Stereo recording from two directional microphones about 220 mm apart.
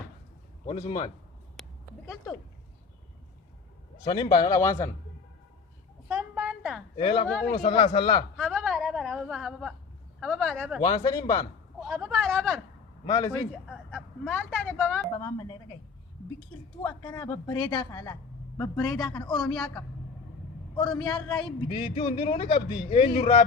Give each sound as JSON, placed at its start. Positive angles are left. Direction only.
{"t": 0.7, "sound": "a man's voice", "side_deg": 30}
{"t": 4.0, "sound": "a woman's voice", "side_deg": 20}
{"t": 6.1, "sound": "a sound", "side_deg": -5}
{"t": 6.9, "sound": "speech", "side_deg": 25}
{"t": 8.4, "sound": "a sound", "side_deg": 0}
{"t": 10.2, "sound": "a man's voice", "side_deg": 0}
{"t": 10.8, "sound": "a woman's voice", "side_deg": 15}
{"t": 11.9, "sound": "a man's voice", "side_deg": 0}
{"t": 13.1, "sound": "a woman's voice", "side_deg": 15}
{"t": 13.7, "sound": "a woman's voice", "side_deg": 5}
{"t": 16.8, "sound": "a woman's voice", "side_deg": 15}
{"t": 20.8, "sound": "a man's voice", "side_deg": 5}
{"t": 21.1, "sound": "speech", "side_deg": 20}